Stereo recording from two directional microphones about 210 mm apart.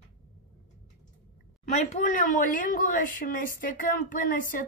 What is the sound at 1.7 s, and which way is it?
Speech, 35° left (ahead or behind).